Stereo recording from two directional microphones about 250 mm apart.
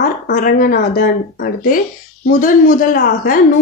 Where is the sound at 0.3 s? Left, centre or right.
Left.